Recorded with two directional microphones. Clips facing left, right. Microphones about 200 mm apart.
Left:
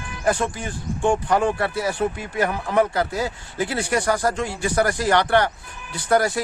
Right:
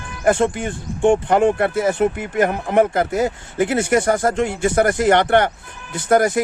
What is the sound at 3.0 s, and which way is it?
Speech, 20° right (ahead or behind).